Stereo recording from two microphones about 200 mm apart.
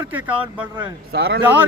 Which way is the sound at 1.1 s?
55° right (ahead or behind).